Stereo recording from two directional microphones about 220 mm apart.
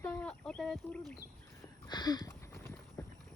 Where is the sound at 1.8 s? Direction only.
20° left (ahead or behind).